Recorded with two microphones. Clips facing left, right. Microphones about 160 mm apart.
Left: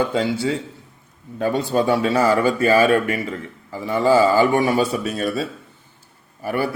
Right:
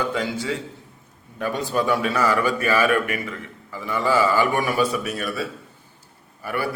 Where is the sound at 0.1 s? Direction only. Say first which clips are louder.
Left 5 dB; 30° left (ahead or behind).